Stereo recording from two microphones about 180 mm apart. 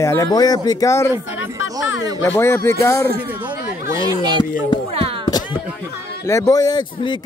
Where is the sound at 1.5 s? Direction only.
90° left.